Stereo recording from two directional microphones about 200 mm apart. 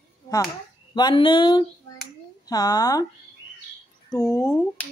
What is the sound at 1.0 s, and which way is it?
A child's voice, 25° left (ahead or behind).